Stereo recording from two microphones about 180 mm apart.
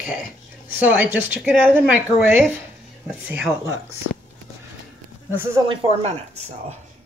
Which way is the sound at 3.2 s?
5° right (ahead or behind).